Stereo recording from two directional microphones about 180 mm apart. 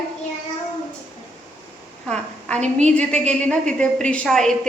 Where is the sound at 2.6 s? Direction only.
40° right (ahead or behind).